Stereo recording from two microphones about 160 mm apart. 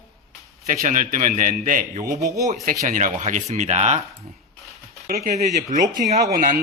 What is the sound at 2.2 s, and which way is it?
Speech, 20° right (ahead or behind).